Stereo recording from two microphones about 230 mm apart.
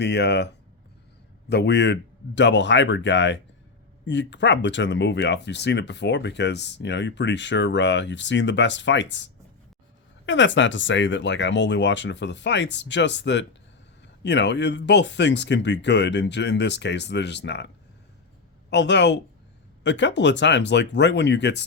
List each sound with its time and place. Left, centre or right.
0.0 s speech: left
18.7 s speech: left